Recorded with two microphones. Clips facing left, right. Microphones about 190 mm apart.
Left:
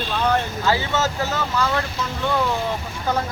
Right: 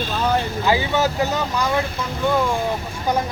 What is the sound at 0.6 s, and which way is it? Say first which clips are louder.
Speech: right 3 dB; 15° right (ahead or behind).